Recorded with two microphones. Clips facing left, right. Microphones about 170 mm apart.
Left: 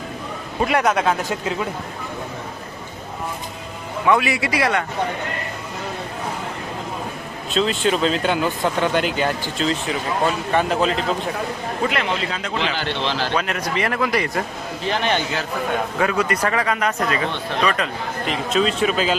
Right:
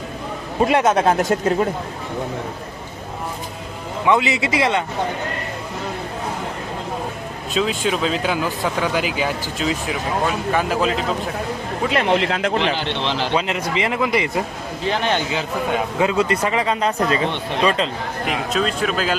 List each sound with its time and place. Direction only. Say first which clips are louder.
0.7 s speech: right 2 dB; 25° right (ahead or behind)
1.0 s speech: right 5 dB; 45° right (ahead or behind)
4.0 s speech: right 1 dB; 20° right (ahead or behind)
7.5 s speech: left 1 dB; centre (ahead or behind)
12.0 s speech: right 6 dB; 65° right (ahead or behind)
13.1 s a man's voice: right 3 dB; 20° right (ahead or behind)
16.0 s speech: right 2 dB; 25° right (ahead or behind)
18.5 s speech: left 3 dB; centre (ahead or behind)